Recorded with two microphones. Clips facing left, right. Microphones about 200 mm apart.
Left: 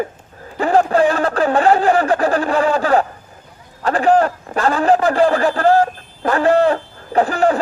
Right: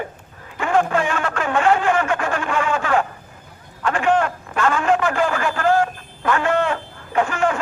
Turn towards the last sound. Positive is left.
turn(degrees=35)  # may be behind; listen again after turning